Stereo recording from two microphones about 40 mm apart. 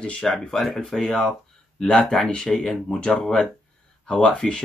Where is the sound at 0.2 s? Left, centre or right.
Centre.